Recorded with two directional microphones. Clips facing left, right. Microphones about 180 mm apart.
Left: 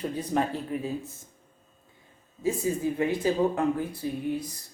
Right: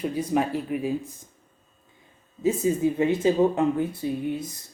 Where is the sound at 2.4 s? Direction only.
20° right (ahead or behind).